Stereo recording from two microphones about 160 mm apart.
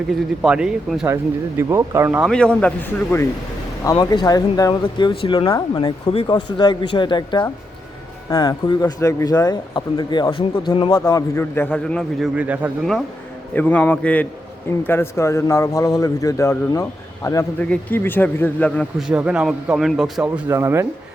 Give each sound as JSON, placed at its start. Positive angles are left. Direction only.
{"t": 0.1, "sound": "speech", "side_deg": -5}
{"t": 1.0, "sound": "speech", "side_deg": -15}
{"t": 2.2, "sound": "a man's voice", "side_deg": 5}
{"t": 3.8, "sound": "speech", "side_deg": 25}
{"t": 11.0, "sound": "a man's voice", "side_deg": 15}
{"t": 12.4, "sound": "speech", "side_deg": -5}
{"t": 13.5, "sound": "a man's voice", "side_deg": 10}
{"t": 17.6, "sound": "a man's voice", "side_deg": 10}
{"t": 18.9, "sound": "speech", "side_deg": -5}